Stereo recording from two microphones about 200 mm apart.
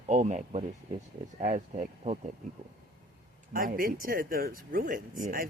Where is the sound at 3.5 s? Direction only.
45° right (ahead or behind).